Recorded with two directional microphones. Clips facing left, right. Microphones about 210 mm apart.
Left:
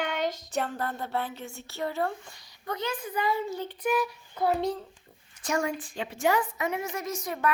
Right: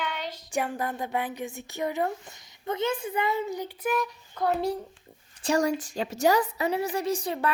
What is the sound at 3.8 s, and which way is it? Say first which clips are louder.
Speech: left 1 dB; centre (ahead or behind).